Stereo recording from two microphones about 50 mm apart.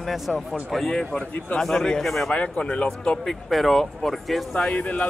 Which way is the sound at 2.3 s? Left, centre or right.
Left.